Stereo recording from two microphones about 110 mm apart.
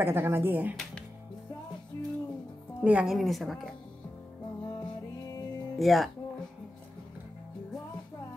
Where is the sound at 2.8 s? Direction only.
10° right (ahead or behind).